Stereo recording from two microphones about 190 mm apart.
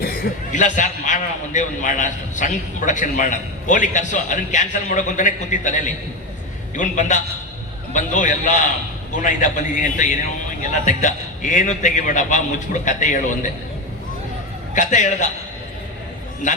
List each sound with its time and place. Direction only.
0.0 s a man's voice: 50° left (ahead or behind)
14.8 s a man's voice: 40° left (ahead or behind)
16.4 s a man's voice: 40° left (ahead or behind)